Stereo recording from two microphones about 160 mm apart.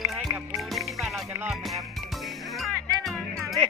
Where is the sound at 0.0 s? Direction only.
Centre (ahead or behind).